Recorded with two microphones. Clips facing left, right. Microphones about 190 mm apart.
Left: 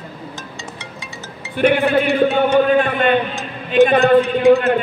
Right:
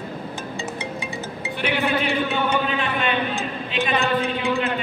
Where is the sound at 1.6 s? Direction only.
50° left (ahead or behind).